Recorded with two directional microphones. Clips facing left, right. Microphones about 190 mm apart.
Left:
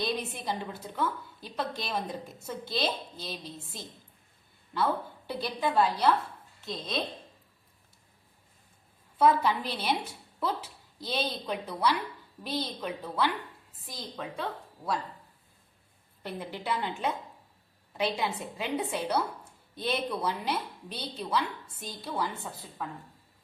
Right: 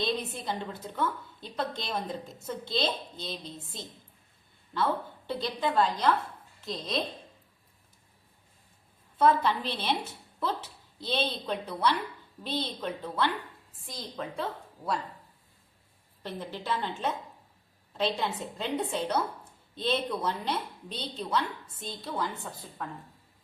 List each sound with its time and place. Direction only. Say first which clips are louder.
0.0 s a woman's voice: right 1 dB; 10° left (ahead or behind)
9.1 s a woman's voice: even; 10° left (ahead or behind)
16.2 s a woman's voice: even; 15° left (ahead or behind)